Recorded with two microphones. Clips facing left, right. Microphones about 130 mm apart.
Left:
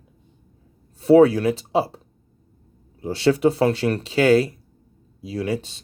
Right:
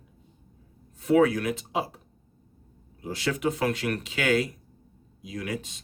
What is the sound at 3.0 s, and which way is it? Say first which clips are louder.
Speech: left 10 dB; 30° left (ahead or behind).